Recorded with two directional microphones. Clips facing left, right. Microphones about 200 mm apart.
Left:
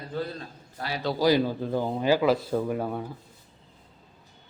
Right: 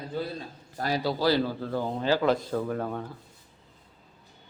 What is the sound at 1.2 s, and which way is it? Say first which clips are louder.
Speech: left 5 dB; 15° left (ahead or behind).